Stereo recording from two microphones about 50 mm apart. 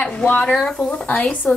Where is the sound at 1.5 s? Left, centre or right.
Left.